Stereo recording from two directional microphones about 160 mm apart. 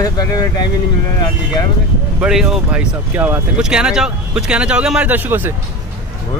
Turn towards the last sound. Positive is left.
turn(degrees=-10)  # may be behind; listen again after turning